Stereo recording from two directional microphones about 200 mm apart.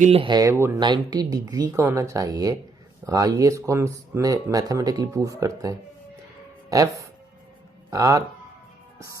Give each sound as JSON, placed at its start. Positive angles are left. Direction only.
{"t": 0.0, "sound": "speech", "side_deg": -30}